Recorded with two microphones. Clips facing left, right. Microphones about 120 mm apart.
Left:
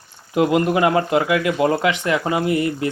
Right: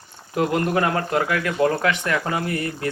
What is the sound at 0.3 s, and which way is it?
A man's voice, 15° left (ahead or behind).